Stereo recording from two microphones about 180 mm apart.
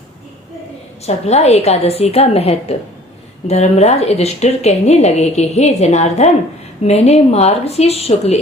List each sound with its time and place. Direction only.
1.0 s a woman's voice: 35° left (ahead or behind)